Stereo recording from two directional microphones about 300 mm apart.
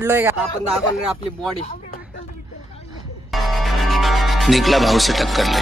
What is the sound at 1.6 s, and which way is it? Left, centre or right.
Speech, left.